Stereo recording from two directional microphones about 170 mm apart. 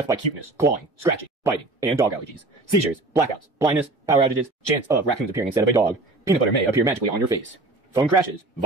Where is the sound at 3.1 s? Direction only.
20° right (ahead or behind).